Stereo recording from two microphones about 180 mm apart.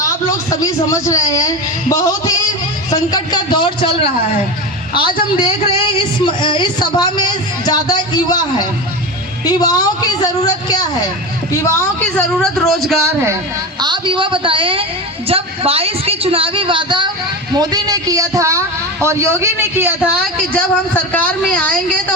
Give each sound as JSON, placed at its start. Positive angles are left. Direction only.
{"t": 0.0, "sound": "a man's voice", "side_deg": 20}
{"t": 6.2, "sound": "speech", "side_deg": 25}
{"t": 9.4, "sound": "speech", "side_deg": 20}
{"t": 11.5, "sound": "a man's voice", "side_deg": 10}
{"t": 13.8, "sound": "a man's voice", "side_deg": -25}
{"t": 20.5, "sound": "a man's voice", "side_deg": 5}